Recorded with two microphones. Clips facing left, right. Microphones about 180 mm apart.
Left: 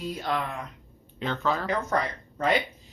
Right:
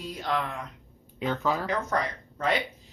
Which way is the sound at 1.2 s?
10° right (ahead or behind).